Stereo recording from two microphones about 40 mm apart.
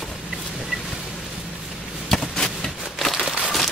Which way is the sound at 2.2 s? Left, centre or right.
Centre.